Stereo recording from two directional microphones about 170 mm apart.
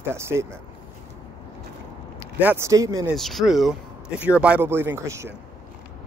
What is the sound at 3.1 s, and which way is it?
A man's voice, centre (ahead or behind).